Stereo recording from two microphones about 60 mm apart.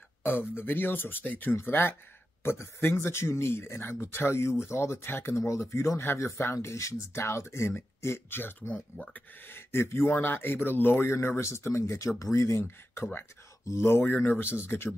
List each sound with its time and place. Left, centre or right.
0.2 s speech: left
1.5 s speech: left